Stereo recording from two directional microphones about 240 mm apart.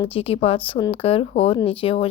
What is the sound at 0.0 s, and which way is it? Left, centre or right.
Speech, left.